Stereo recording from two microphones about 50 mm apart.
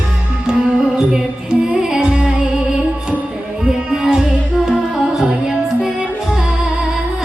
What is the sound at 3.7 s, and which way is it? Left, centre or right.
Music, centre.